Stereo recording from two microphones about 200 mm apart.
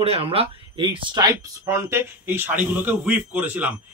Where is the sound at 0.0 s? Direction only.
30° right (ahead or behind).